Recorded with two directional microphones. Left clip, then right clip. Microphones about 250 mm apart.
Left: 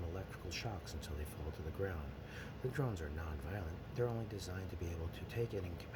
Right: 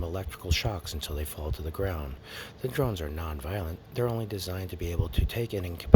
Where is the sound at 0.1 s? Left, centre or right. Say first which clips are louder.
Right 13 dB; right.